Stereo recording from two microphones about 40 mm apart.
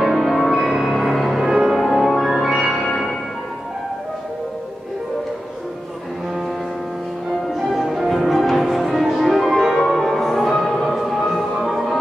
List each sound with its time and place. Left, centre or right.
0.0 s music: centre
1.4 s music: centre
1.8 s music: centre
7.5 s change ringing: centre
9.2 s music: centre